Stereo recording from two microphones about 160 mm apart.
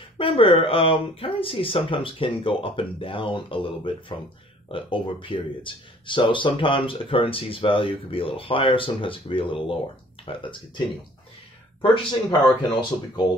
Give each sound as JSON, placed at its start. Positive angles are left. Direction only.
{"t": 0.2, "sound": "speech", "side_deg": 35}
{"t": 11.8, "sound": "speech", "side_deg": 30}